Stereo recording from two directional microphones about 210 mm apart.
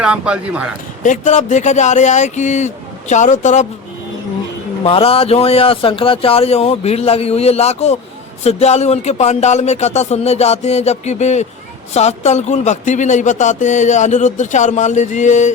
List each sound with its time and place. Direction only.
0.0 s speech: 5° right (ahead or behind)
1.0 s speech: 35° left (ahead or behind)
4.8 s a man's voice: 25° left (ahead or behind)